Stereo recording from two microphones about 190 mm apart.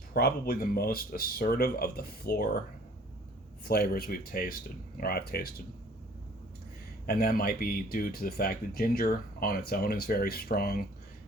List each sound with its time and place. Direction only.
0.1 s speech: 55° left (ahead or behind)
3.7 s speech: 55° left (ahead or behind)
7.1 s speech: 50° left (ahead or behind)